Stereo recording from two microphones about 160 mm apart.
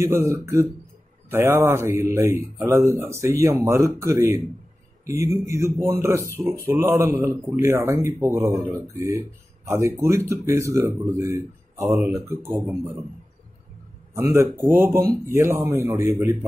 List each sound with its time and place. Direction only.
0.0 s speech: 15° right (ahead or behind)
14.1 s speech: 20° right (ahead or behind)